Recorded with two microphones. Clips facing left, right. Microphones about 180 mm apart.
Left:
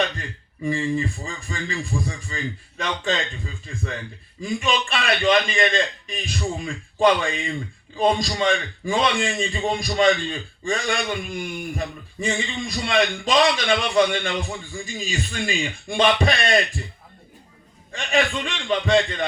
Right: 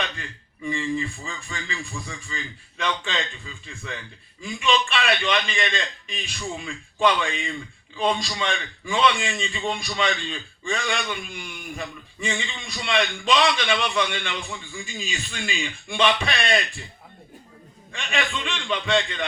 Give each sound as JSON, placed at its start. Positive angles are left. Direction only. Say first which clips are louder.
{"t": 0.6, "sound": "speech", "louder": "left 3 dB", "side_deg": 35}
{"t": 17.9, "sound": "speech", "louder": "left 6 dB", "side_deg": 40}